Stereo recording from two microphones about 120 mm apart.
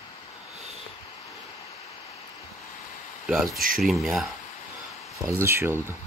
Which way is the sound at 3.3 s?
Centre (ahead or behind).